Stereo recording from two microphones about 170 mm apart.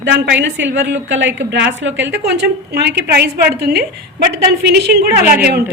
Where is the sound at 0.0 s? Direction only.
90° right; by 4.9 s 70° right (ahead or behind).